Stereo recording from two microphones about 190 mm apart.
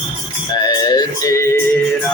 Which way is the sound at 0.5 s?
20° left (ahead or behind).